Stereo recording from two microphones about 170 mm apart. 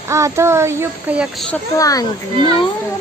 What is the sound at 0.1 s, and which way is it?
Speech, 15° right (ahead or behind).